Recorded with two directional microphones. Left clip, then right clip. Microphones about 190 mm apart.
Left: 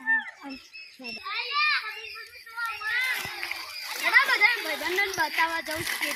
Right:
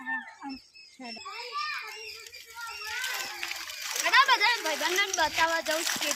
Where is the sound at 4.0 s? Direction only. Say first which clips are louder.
Left 1 dB; 20° right (ahead or behind).